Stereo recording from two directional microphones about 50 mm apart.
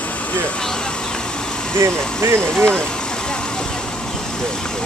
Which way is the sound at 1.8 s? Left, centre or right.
Right.